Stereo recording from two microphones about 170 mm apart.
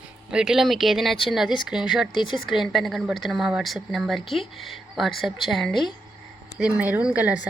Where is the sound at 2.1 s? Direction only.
30° left (ahead or behind).